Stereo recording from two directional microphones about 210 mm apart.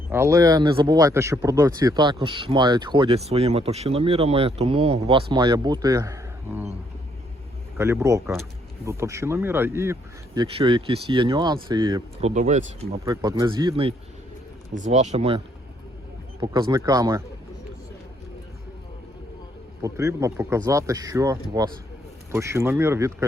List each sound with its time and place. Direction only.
0.1 s speech: 15° right (ahead or behind)
7.8 s speech: 10° right (ahead or behind)
10.4 s speech: 25° right (ahead or behind)
12.3 s speech: 35° right (ahead or behind)
13.1 s speech: 20° right (ahead or behind)
14.7 s speech: 35° right (ahead or behind)
16.4 s speech: 20° right (ahead or behind)
19.8 s speech: 15° right (ahead or behind)